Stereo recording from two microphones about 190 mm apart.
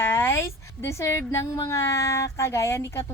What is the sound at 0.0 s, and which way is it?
A woman's voice, 15° left (ahead or behind).